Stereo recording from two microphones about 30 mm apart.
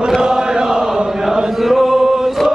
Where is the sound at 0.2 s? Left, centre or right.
Right.